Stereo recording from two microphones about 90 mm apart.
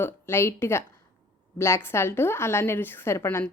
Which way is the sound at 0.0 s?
30° left (ahead or behind).